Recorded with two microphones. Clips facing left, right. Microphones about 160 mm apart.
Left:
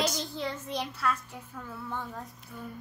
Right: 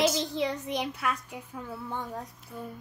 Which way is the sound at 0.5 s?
15° right (ahead or behind).